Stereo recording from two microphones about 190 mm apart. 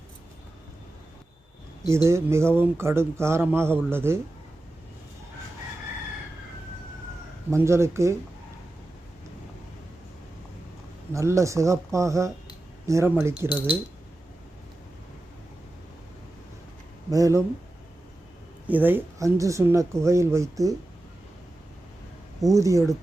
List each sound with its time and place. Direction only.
1.9 s speech: 15° right (ahead or behind)
7.5 s speech: 15° right (ahead or behind)
11.1 s speech: 15° right (ahead or behind)
17.1 s speech: 15° right (ahead or behind)
18.7 s speech: 10° right (ahead or behind)
22.4 s speech: 15° right (ahead or behind)